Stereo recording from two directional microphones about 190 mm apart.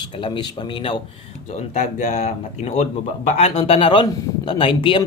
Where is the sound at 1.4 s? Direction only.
40° left (ahead or behind).